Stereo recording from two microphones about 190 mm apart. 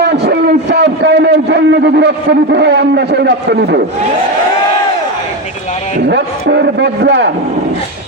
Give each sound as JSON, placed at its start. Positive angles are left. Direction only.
{"t": 0.0, "sound": "a man's voice", "side_deg": -65}
{"t": 6.1, "sound": "a man's voice", "side_deg": -60}